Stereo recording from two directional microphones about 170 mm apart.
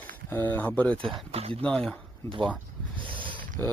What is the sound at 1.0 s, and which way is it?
Speech, 35° right (ahead or behind).